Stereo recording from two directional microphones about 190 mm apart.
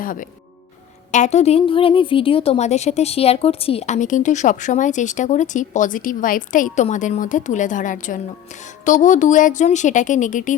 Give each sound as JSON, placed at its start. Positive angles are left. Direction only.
{"t": 0.0, "sound": "a woman's voice", "side_deg": 45}